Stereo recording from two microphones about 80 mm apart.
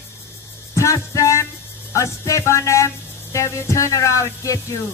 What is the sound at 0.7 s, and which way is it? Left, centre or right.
Music, left.